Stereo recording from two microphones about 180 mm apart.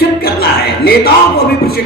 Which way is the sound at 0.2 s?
60° left (ahead or behind).